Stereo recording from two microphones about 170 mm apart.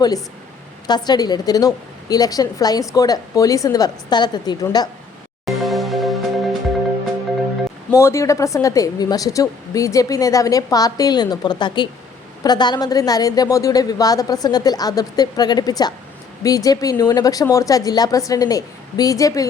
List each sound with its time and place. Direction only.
0.9 s a woman's voice: 25° left (ahead or behind)
5.5 s music: centre (ahead or behind)
7.9 s a woman's voice: 15° left (ahead or behind)